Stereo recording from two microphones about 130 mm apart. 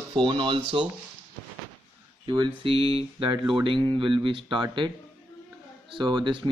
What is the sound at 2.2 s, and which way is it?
Speech, 40° right (ahead or behind).